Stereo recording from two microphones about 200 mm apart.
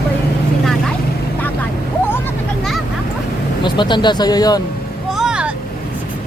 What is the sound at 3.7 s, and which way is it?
Speech, 25° left (ahead or behind).